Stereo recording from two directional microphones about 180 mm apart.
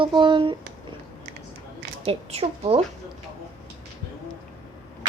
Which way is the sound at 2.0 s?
35° right (ahead or behind).